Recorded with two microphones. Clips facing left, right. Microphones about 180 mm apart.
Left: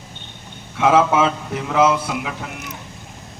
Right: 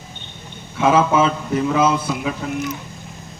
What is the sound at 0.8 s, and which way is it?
A man's voice, 70° left (ahead or behind).